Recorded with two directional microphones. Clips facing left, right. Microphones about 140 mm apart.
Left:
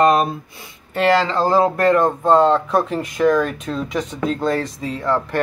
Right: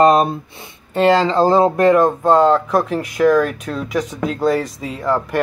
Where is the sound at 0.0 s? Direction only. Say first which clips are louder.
Right 3 dB; 30° right (ahead or behind).